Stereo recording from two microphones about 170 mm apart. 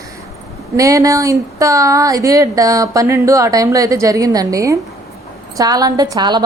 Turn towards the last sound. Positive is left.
turn(degrees=-25)  # may be behind; listen again after turning